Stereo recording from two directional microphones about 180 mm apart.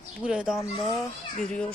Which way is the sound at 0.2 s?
5° right (ahead or behind).